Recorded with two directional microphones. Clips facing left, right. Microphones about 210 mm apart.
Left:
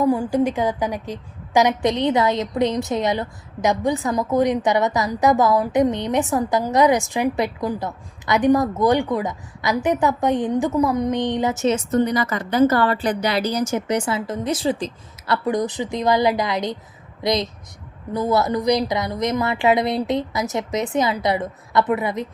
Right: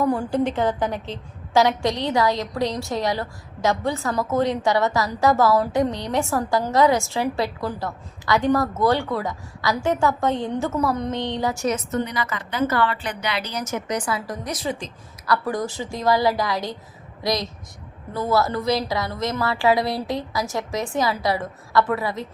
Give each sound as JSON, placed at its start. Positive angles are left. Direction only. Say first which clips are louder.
{"t": 0.0, "sound": "a woman's voice", "louder": "left 3 dB", "side_deg": 10}
{"t": 15.4, "sound": "a woman's voice", "louder": "left 4 dB", "side_deg": 20}